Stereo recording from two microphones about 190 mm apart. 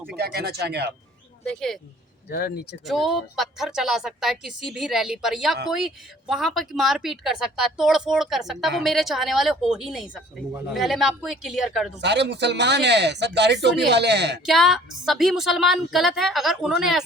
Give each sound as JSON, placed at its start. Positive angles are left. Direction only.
{"t": 0.2, "sound": "speech", "side_deg": -55}
{"t": 1.5, "sound": "speech", "side_deg": 0}
{"t": 2.3, "sound": "speech", "side_deg": 55}
{"t": 2.8, "sound": "speech", "side_deg": 0}
{"t": 11.9, "sound": "speech", "side_deg": -65}
{"t": 14.4, "sound": "speech", "side_deg": 0}